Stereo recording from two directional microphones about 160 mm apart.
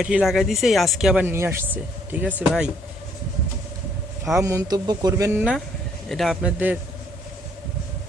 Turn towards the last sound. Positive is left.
turn(degrees=-10)  # may be behind; listen again after turning